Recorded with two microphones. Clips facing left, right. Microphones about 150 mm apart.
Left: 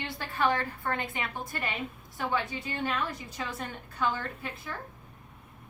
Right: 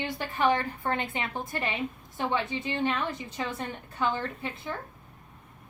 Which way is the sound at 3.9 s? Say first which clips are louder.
Right 2 dB; 25° right (ahead or behind).